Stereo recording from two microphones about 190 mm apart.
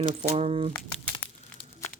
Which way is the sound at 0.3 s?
35° right (ahead or behind).